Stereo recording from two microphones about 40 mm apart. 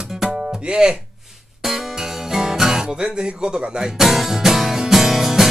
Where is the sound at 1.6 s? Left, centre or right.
Centre.